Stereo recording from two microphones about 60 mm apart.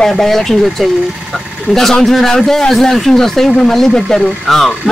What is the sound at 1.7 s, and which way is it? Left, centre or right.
Speech, centre.